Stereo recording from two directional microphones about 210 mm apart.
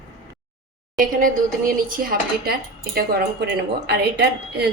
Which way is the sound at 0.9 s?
40° right (ahead or behind).